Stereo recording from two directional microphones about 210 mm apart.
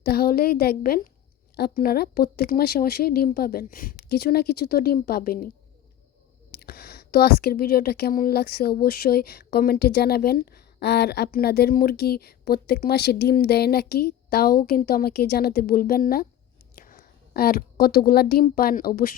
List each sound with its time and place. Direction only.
0.0 s a woman's voice: 45° left (ahead or behind)
6.6 s a woman's voice: 50° left (ahead or behind)
16.7 s a sound: 45° left (ahead or behind)
18.4 s a woman's voice: 40° left (ahead or behind)